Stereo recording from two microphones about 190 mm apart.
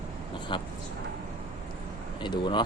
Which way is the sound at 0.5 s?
25° left (ahead or behind).